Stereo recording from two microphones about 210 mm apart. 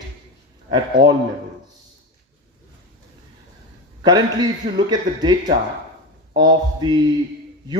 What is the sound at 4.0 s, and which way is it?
Speech, 20° right (ahead or behind).